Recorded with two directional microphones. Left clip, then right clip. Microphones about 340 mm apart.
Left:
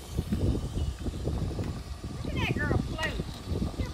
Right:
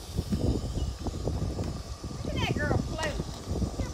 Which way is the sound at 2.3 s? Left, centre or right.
Right.